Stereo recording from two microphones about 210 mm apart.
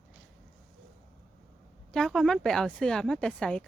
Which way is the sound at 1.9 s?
Centre (ahead or behind).